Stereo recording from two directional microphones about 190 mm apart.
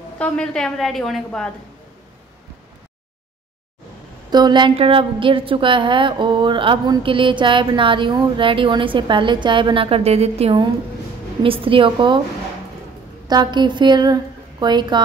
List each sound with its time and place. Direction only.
0.2 s a woman's voice: 5° left (ahead or behind)
4.3 s a woman's voice: 20° right (ahead or behind)
13.3 s a woman's voice: 25° right (ahead or behind)